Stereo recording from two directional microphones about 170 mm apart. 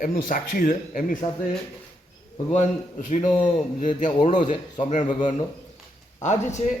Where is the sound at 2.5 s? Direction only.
45° left (ahead or behind).